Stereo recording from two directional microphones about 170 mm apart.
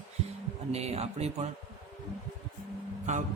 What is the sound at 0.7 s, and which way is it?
Speech, 40° right (ahead or behind).